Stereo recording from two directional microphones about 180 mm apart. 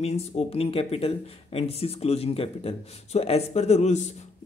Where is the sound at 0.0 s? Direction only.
35° left (ahead or behind).